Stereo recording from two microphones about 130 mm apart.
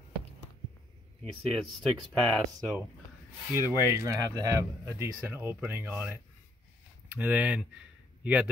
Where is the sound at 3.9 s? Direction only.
30° right (ahead or behind).